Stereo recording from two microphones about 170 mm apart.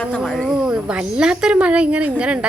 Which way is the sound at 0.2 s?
Centre (ahead or behind).